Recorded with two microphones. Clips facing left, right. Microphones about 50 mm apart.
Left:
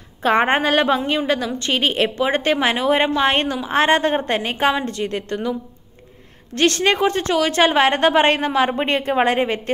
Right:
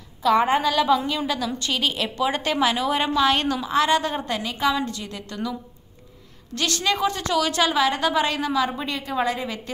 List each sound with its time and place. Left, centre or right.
0.2 s a woman's voice: left
3.7 s a woman's voice: left